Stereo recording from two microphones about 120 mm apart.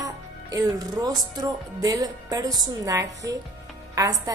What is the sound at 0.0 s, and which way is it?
Speech, 30° right (ahead or behind).